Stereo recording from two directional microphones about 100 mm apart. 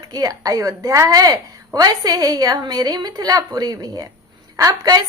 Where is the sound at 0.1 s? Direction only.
40° right (ahead or behind).